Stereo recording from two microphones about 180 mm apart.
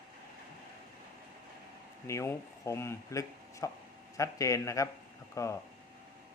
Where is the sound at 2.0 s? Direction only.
15° left (ahead or behind).